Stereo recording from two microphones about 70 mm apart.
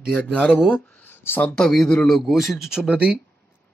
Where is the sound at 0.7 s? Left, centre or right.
Centre.